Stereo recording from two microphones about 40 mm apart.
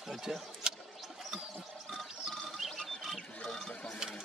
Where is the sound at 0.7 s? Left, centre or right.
Centre.